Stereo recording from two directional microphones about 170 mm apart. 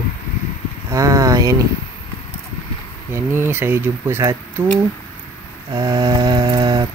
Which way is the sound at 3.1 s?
15° right (ahead or behind).